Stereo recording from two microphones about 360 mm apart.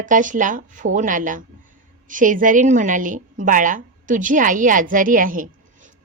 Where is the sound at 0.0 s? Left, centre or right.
Right.